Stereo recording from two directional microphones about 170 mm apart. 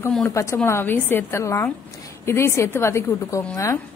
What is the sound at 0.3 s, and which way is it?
A woman's voice, 15° left (ahead or behind).